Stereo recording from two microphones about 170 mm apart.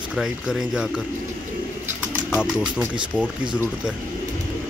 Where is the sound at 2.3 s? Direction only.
5° right (ahead or behind).